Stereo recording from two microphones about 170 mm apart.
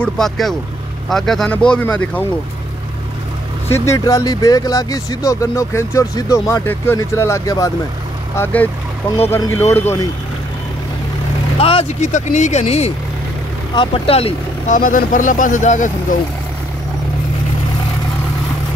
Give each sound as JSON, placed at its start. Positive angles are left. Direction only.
{"t": 0.0, "sound": "speech", "side_deg": 0}
{"t": 3.7, "sound": "speech", "side_deg": 20}
{"t": 9.3, "sound": "a man's voice", "side_deg": 15}
{"t": 11.5, "sound": "speech", "side_deg": 35}
{"t": 14.7, "sound": "speech", "side_deg": 55}